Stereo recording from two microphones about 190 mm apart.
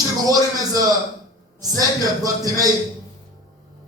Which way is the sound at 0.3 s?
20° right (ahead or behind).